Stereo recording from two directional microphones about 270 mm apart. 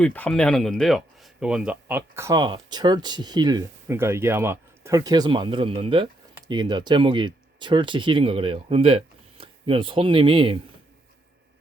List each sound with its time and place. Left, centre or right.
0.0 s speech: centre